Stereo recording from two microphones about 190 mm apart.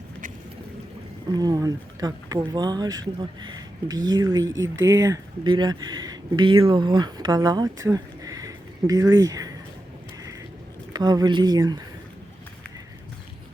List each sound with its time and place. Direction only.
1.3 s speech: 20° right (ahead or behind)
10.9 s speech: 20° right (ahead or behind)